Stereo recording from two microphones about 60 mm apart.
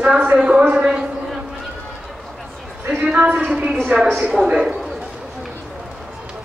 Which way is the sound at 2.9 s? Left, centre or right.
Centre.